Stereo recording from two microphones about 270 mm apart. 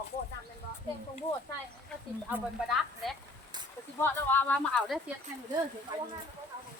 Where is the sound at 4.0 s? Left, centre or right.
Centre.